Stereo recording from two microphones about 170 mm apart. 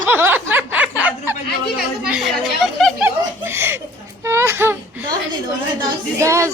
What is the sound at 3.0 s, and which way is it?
Speech, 15° right (ahead or behind).